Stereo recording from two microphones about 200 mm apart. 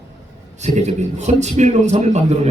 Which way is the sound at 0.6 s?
35° right (ahead or behind).